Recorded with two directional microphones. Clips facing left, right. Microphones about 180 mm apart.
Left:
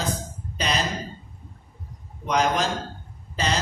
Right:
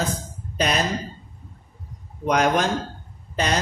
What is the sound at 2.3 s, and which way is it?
Speech, 55° right (ahead or behind).